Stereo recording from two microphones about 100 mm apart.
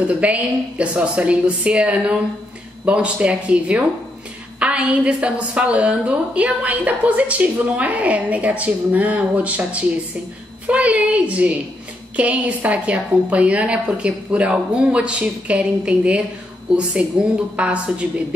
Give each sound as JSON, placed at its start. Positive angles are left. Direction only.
{"t": 0.0, "sound": "a woman's voice", "side_deg": -15}
{"t": 17.6, "sound": "a woman's voice", "side_deg": -10}